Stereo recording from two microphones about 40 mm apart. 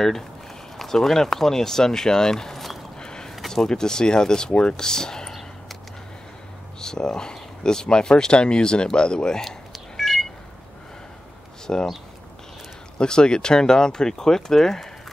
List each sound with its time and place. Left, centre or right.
0.7 s speech: centre
3.0 s a sound: centre
3.3 s a sound: centre
3.6 s speech: centre
6.8 s speech: centre
9.4 s cat: centre
11.6 s speech: centre
12.9 s speech: left